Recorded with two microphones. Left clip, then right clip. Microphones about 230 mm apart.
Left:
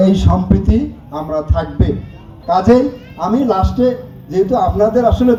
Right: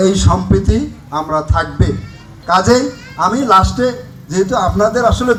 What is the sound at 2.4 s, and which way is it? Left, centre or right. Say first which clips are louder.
Speech: even; left.